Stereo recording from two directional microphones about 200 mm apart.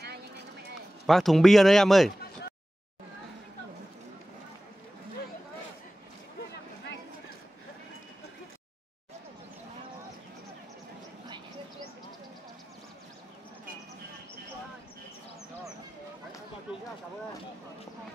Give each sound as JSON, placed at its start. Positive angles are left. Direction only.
{"t": 1.0, "sound": "a man's voice", "side_deg": 0}